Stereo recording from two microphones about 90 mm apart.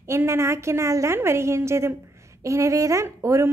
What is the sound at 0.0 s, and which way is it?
A woman's voice, 30° right (ahead or behind).